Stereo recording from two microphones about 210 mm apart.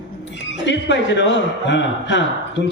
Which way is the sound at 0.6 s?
55° left (ahead or behind).